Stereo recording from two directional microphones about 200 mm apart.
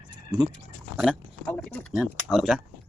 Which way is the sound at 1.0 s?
Centre (ahead or behind).